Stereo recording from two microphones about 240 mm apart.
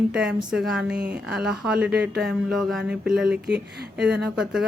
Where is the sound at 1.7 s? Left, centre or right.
Right.